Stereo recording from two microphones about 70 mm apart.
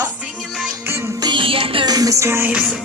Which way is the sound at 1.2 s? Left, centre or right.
Right.